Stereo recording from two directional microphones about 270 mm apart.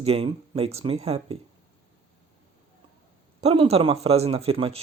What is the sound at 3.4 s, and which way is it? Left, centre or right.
Speech, right.